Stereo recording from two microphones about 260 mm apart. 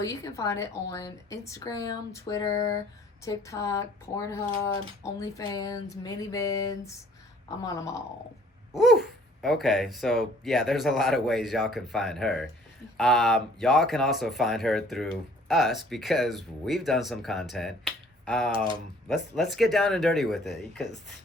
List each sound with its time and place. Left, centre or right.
0.0 s a woman's voice: centre
8.7 s speech: centre
18.5 s speech: centre
19.0 s speech: centre